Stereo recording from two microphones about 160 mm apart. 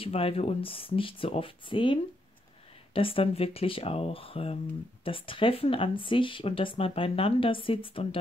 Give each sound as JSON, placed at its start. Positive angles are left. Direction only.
{"t": 0.0, "sound": "speech", "side_deg": 35}